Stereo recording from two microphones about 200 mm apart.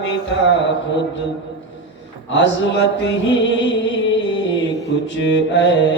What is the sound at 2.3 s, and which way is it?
Mantra, 65° left (ahead or behind).